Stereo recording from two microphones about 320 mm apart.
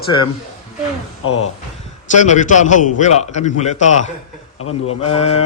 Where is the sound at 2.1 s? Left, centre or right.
Left.